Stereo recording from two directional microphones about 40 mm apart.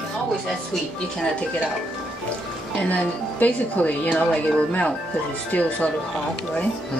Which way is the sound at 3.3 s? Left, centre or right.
Left.